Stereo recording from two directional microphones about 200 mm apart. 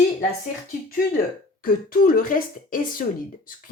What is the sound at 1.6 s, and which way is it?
Speech, 45° left (ahead or behind).